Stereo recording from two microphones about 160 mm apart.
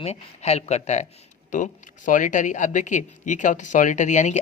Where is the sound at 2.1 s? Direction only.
55° left (ahead or behind).